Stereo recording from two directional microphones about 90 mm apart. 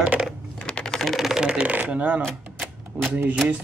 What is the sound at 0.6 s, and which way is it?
Speech, 10° left (ahead or behind).